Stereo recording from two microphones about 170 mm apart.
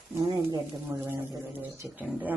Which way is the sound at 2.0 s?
Centre (ahead or behind).